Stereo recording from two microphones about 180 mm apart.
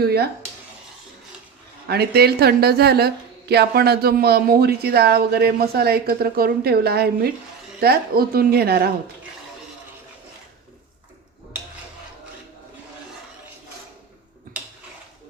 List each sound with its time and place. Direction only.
0.0 s speech: 60° right (ahead or behind)
1.9 s speech: 60° right (ahead or behind)